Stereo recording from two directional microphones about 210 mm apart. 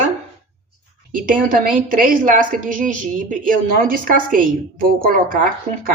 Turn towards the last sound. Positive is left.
turn(degrees=-40)  # may be behind; listen again after turning